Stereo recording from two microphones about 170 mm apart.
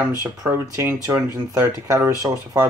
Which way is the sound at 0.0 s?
15° right (ahead or behind).